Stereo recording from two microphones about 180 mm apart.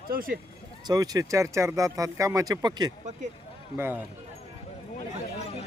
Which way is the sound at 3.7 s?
10° right (ahead or behind).